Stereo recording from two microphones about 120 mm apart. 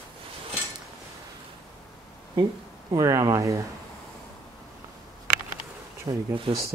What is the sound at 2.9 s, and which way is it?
Speech, 25° right (ahead or behind).